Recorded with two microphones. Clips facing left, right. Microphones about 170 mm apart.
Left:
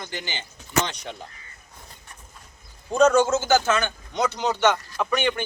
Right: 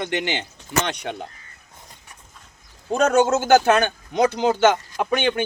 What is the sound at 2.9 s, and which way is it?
Speech, 55° right (ahead or behind).